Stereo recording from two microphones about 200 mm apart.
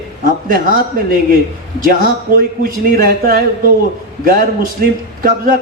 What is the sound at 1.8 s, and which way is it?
A man's voice, 45° right (ahead or behind).